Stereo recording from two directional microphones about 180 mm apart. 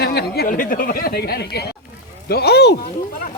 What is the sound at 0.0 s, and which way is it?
Speech, 65° left (ahead or behind).